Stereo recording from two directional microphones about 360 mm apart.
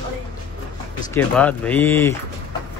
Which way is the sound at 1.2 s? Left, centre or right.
Centre.